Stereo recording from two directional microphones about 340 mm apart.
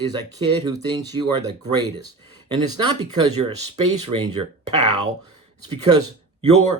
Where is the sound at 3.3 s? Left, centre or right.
Right.